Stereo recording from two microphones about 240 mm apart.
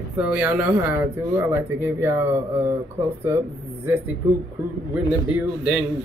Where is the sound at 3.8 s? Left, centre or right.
Centre.